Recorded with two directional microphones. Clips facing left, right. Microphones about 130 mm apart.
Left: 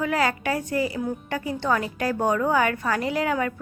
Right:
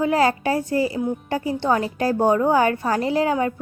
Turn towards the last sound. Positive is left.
turn(degrees=-30)  # may be behind; listen again after turning